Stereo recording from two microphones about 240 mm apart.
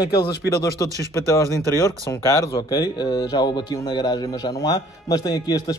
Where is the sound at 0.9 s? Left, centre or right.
Centre.